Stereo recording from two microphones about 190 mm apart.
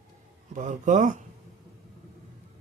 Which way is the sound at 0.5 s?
40° right (ahead or behind).